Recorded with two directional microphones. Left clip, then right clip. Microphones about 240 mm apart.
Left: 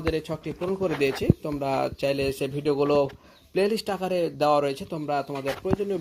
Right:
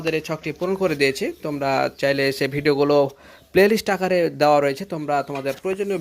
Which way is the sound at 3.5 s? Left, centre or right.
Right.